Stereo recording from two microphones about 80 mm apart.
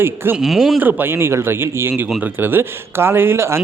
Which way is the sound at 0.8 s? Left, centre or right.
Right.